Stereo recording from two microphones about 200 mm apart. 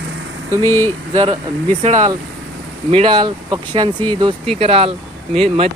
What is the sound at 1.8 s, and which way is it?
Speech, 35° right (ahead or behind).